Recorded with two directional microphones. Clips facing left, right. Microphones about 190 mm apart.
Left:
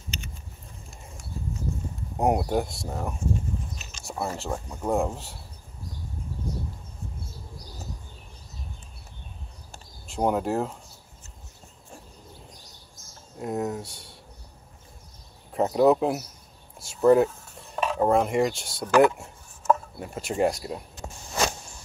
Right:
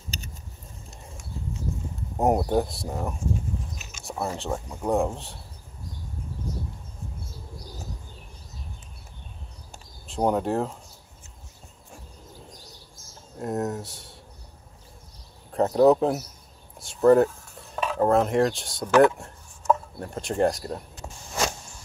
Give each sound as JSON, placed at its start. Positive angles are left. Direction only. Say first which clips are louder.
{"t": 0.1, "sound": "a sound", "louder": "left 1 dB", "side_deg": -35}
{"t": 1.3, "sound": "horse", "louder": "left 1 dB", "side_deg": -20}
{"t": 2.1, "sound": "speech", "louder": "right 2 dB", "side_deg": 0}
{"t": 10.0, "sound": "speech", "louder": "right 1 dB", "side_deg": 0}
{"t": 13.4, "sound": "speech", "louder": "right 1 dB", "side_deg": 0}
{"t": 15.5, "sound": "speech", "louder": "right 2 dB", "side_deg": 5}
{"t": 17.8, "sound": "cutlery", "louder": "even", "side_deg": 10}
{"t": 18.1, "sound": "speech", "louder": "right 3 dB", "side_deg": 0}